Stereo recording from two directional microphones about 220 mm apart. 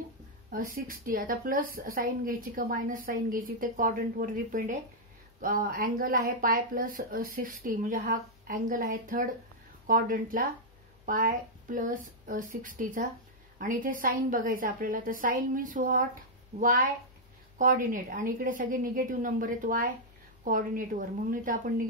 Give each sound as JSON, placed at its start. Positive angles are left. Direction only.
{"t": 0.5, "sound": "a woman's voice", "side_deg": -40}